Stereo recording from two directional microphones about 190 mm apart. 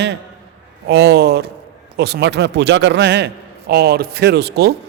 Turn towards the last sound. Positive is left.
turn(degrees=-60)  # may be behind; listen again after turning